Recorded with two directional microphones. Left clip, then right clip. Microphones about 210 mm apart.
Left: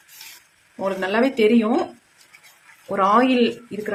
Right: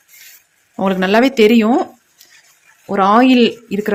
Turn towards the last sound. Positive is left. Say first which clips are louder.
# right 7 dB
turn(degrees=-45)  # may be behind; listen again after turning